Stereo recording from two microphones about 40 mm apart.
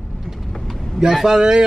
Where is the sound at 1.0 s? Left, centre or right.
Centre.